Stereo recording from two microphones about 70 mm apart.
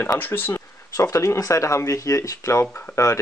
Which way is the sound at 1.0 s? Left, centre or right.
Left.